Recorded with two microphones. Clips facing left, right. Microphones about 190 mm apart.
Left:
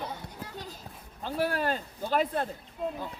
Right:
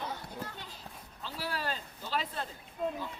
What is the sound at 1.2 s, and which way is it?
Speech, 50° left (ahead or behind).